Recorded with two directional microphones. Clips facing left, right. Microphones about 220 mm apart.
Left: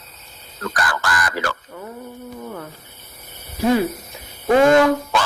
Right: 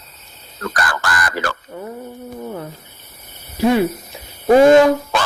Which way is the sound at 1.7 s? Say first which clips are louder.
Right 4 dB; 30° right (ahead or behind).